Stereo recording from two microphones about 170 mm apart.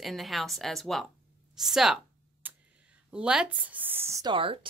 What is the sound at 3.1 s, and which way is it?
A woman's voice, 5° right (ahead or behind).